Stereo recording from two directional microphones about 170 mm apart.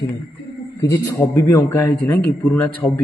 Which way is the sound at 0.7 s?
20° left (ahead or behind).